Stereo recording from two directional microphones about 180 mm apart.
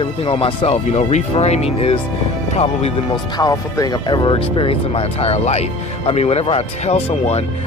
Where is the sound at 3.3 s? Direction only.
20° left (ahead or behind).